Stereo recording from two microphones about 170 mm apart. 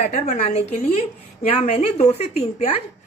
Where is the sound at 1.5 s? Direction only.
40° left (ahead or behind).